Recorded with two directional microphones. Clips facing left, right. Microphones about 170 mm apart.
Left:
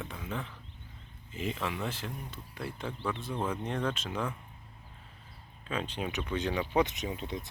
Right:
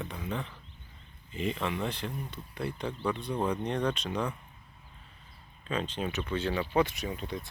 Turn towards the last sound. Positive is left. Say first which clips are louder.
# even
turn(degrees=20)  # may be behind; listen again after turning